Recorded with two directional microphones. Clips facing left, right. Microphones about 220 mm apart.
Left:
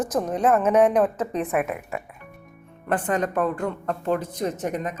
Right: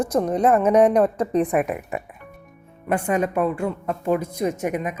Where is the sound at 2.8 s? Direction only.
10° right (ahead or behind).